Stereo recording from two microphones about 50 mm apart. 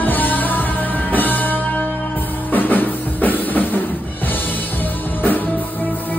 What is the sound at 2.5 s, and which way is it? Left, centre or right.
Music, left.